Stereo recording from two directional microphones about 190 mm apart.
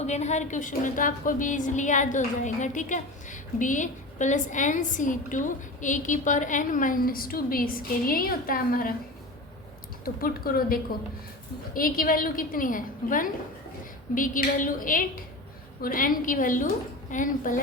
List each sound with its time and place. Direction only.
0.0 s a woman's voice: 35° left (ahead or behind)
10.0 s a woman's voice: 50° left (ahead or behind)